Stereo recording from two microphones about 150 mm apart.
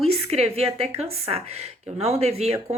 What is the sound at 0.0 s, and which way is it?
A woman's voice, 45° right (ahead or behind).